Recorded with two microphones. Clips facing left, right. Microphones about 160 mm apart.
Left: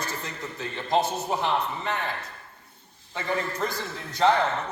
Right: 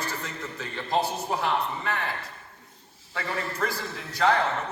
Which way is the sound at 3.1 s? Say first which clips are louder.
Left 3 dB; 20° left (ahead or behind).